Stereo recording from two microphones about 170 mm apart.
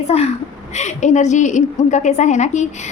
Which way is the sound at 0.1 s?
40° left (ahead or behind).